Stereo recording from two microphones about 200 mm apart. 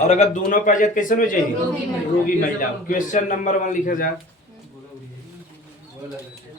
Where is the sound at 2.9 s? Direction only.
40° left (ahead or behind).